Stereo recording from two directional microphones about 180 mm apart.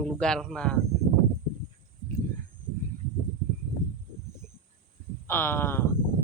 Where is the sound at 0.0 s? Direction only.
5° left (ahead or behind).